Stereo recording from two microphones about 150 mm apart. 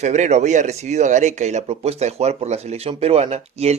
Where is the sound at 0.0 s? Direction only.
50° right (ahead or behind).